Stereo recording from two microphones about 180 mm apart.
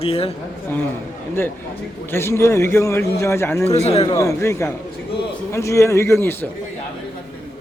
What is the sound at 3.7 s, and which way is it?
Speech, 35° left (ahead or behind).